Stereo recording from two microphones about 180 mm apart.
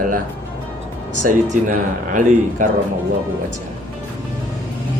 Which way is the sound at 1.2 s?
45° right (ahead or behind).